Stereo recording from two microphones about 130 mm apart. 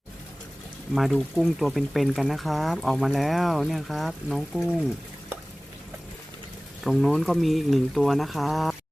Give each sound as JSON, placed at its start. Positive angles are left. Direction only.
{"t": 0.9, "sound": "speech", "side_deg": 0}
{"t": 6.8, "sound": "speech", "side_deg": 0}